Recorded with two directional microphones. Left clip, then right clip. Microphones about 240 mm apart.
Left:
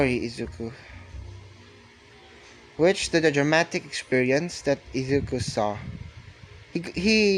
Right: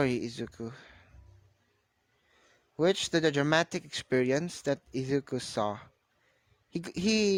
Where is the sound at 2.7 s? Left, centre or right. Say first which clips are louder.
Left 6 dB; right.